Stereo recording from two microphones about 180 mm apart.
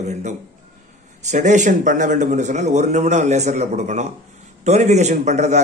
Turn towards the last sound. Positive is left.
turn(degrees=-40)  # may be behind; listen again after turning